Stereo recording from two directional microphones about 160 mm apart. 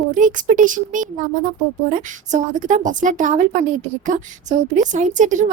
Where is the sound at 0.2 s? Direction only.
55° right (ahead or behind).